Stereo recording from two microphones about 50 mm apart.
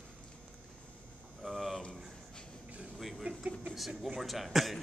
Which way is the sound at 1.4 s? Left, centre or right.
Centre.